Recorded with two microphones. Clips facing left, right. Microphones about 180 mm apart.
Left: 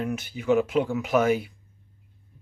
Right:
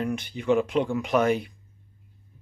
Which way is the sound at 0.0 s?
5° left (ahead or behind).